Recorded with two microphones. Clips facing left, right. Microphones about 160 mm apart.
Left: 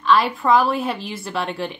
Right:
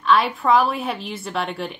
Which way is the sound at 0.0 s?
Centre (ahead or behind).